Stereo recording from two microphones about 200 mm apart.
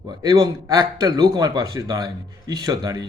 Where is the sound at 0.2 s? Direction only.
20° right (ahead or behind).